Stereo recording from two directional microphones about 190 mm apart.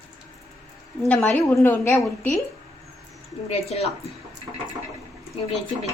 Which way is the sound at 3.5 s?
35° left (ahead or behind).